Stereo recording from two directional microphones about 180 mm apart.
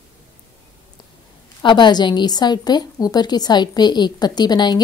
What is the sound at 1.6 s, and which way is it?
A woman's voice, 25° left (ahead or behind).